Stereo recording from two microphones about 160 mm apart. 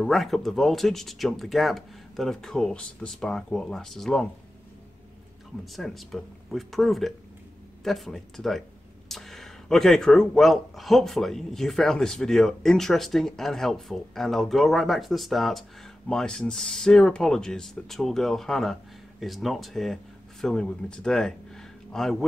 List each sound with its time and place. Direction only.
0.0 s a man's voice: centre (ahead or behind)
5.8 s a man's voice: centre (ahead or behind)